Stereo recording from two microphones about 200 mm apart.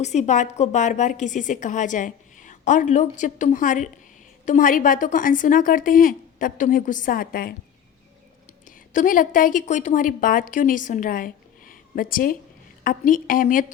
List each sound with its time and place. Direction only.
0.0 s a woman's voice: 35° left (ahead or behind)
8.9 s a woman's voice: 40° left (ahead or behind)